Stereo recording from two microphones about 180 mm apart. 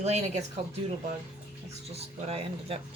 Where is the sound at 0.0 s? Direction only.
40° right (ahead or behind).